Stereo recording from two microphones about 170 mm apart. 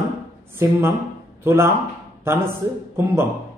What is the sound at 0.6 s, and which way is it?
A man's voice, 15° right (ahead or behind).